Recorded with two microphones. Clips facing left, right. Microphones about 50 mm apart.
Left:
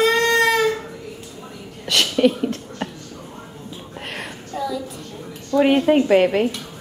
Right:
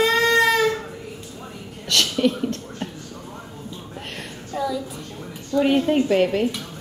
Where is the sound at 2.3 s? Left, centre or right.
Centre.